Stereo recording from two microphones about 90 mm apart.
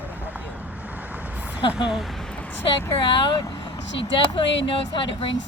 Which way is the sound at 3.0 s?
65° left (ahead or behind).